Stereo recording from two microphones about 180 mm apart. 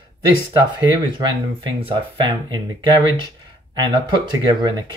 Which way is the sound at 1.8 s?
30° right (ahead or behind).